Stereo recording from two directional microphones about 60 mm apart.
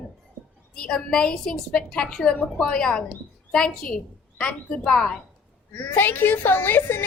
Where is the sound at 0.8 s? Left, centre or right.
Centre.